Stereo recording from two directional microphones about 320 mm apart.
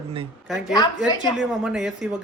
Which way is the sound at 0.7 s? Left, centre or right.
Centre.